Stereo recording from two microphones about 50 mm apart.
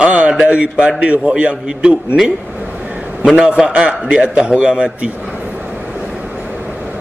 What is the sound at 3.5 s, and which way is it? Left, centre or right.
A man's voice, right.